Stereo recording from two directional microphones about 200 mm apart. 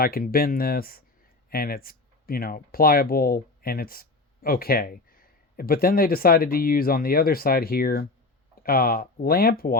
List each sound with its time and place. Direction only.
0.0 s speech: 45° left (ahead or behind)